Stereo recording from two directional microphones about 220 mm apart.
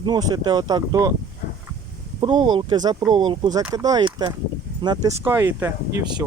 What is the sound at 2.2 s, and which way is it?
Speech, 20° right (ahead or behind).